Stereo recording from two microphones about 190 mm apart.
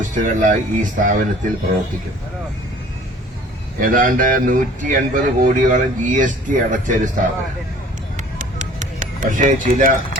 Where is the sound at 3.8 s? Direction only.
45° right (ahead or behind).